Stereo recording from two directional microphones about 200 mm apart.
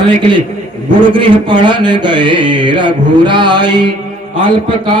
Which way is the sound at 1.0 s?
25° right (ahead or behind).